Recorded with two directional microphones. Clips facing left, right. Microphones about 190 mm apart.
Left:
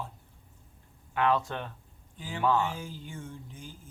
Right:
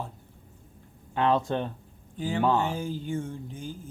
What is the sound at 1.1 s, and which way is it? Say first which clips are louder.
Speech: right 3 dB; 25° right (ahead or behind).